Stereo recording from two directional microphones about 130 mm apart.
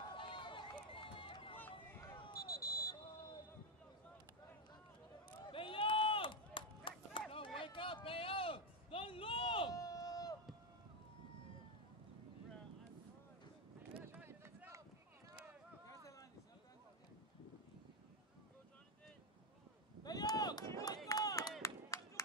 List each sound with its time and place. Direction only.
0.1 s run: 40° left (ahead or behind)
2.3 s a sound: 25° left (ahead or behind)
5.5 s run: 45° left (ahead or behind)
7.6 s a sound: 40° left (ahead or behind)
9.8 s run: 25° left (ahead or behind)
13.9 s a sound: 15° right (ahead or behind)
20.0 s run: 30° left (ahead or behind)
21.1 s chop: 30° left (ahead or behind)
21.6 s clapping: 25° left (ahead or behind)